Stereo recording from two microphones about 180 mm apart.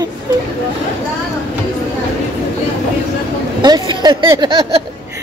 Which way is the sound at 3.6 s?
25° right (ahead or behind).